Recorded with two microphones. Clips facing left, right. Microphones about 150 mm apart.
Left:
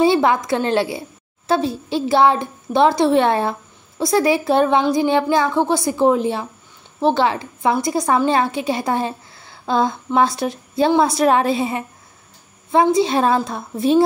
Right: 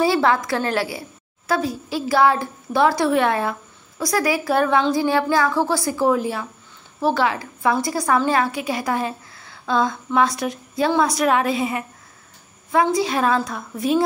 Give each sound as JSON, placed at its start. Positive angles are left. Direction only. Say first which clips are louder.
{"t": 0.0, "sound": "a woman's voice", "louder": "left 3 dB", "side_deg": 20}